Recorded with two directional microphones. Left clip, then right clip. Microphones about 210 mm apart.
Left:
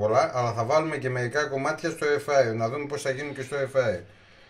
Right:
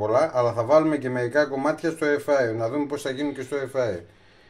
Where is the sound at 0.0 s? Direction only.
30° right (ahead or behind).